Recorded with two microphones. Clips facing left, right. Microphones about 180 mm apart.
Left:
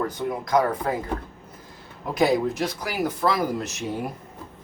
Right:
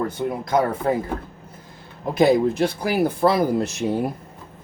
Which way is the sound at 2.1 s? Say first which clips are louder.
Right 4 dB; 30° right (ahead or behind).